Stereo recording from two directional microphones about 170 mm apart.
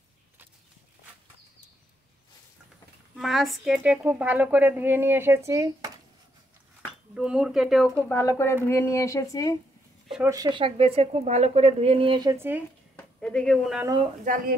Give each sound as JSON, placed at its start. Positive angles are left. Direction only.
{"t": 3.2, "sound": "a woman's voice", "side_deg": 0}
{"t": 7.2, "sound": "speech", "side_deg": -5}
{"t": 8.1, "sound": "speech", "side_deg": 15}
{"t": 10.2, "sound": "speech", "side_deg": -20}
{"t": 12.9, "sound": "speech", "side_deg": 5}
{"t": 14.0, "sound": "speech", "side_deg": -50}